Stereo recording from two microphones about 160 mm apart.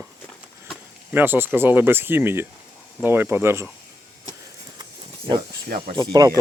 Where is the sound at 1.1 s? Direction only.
10° right (ahead or behind).